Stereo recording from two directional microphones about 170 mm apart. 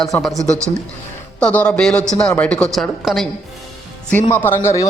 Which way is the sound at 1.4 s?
5° left (ahead or behind).